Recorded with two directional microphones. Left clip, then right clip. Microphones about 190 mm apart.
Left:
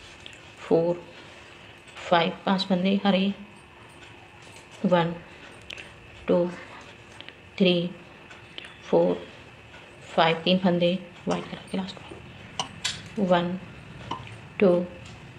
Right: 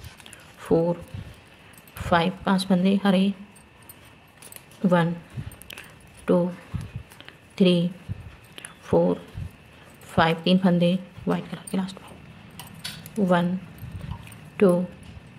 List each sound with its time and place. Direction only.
0.6 s speech: 45° right (ahead or behind)
2.0 s speech: 40° right (ahead or behind)
4.8 s speech: 40° right (ahead or behind)
6.3 s speech: 40° right (ahead or behind)
7.5 s a woman's voice: 45° right (ahead or behind)
8.5 s a sound: 40° right (ahead or behind)
10.1 s speech: 40° right (ahead or behind)
13.2 s a woman's voice: 40° right (ahead or behind)
14.6 s a woman's voice: 45° right (ahead or behind)